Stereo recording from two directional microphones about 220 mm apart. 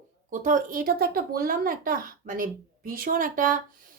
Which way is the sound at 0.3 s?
35° right (ahead or behind).